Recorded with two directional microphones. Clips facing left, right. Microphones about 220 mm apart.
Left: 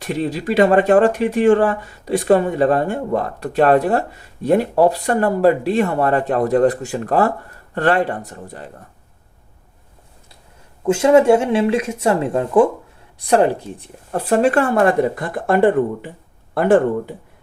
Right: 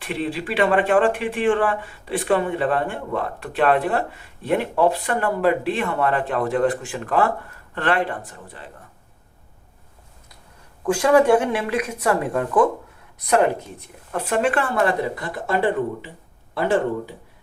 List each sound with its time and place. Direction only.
0.0 s speech: 40° left (ahead or behind)
10.8 s speech: 25° left (ahead or behind); by 17.2 s 55° left (ahead or behind)